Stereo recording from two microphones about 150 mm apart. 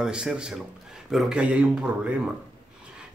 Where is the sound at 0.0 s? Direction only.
5° right (ahead or behind).